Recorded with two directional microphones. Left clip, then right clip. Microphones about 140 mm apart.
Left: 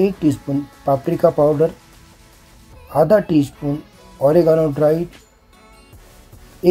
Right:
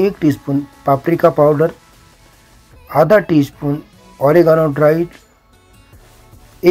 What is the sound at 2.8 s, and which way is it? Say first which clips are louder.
Speech: right 3 dB; 15° right (ahead or behind).